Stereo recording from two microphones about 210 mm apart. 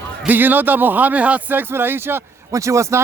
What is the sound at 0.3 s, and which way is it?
A man's voice, 10° right (ahead or behind).